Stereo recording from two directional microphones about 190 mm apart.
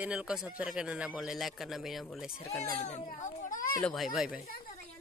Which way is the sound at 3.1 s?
45° left (ahead or behind).